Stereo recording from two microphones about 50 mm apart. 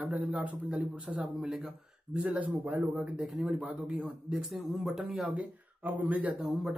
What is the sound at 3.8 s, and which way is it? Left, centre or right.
Speech, right.